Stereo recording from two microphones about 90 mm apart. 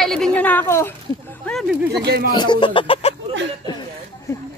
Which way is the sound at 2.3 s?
55° left (ahead or behind).